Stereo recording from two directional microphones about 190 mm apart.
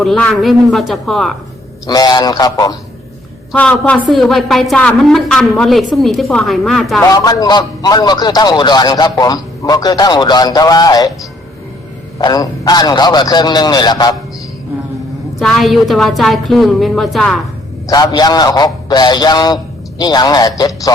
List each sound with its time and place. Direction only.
0.0 s a woman's voice: 5° left (ahead or behind)
1.9 s a man's voice: 20° left (ahead or behind)
3.5 s a woman's voice: 5° left (ahead or behind)
7.0 s a man's voice: 20° left (ahead or behind)
12.2 s a man's voice: 20° left (ahead or behind)
15.4 s a woman's voice: centre (ahead or behind)
17.8 s a man's voice: 20° left (ahead or behind)